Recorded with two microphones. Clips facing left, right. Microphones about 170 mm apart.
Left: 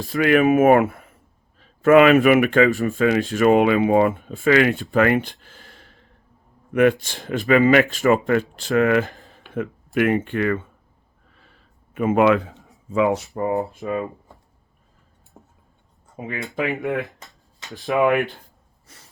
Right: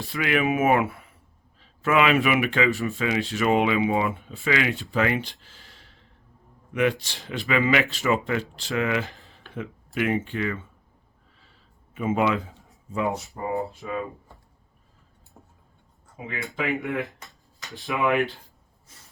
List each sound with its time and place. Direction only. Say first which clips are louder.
0.0 s a man's voice: left 8 dB; 45° left (ahead or behind)
9.6 s speech: left 7 dB; 55° left (ahead or behind)
11.3 s a sound: left 5 dB; 55° left (ahead or behind)
12.9 s speech: left 8 dB; 90° left
13.7 s speech: left 6 dB; 55° left (ahead or behind)
15.3 s a sound: left 3 dB; 20° left (ahead or behind)
16.2 s speech: left 6 dB; 50° left (ahead or behind)
16.6 s speech: left 2 dB; centre (ahead or behind)
18.2 s speech: left 1 dB; 50° left (ahead or behind)